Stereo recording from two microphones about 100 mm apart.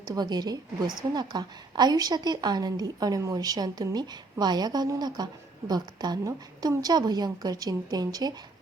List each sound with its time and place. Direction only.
0.0 s a woman's voice: 40° right (ahead or behind)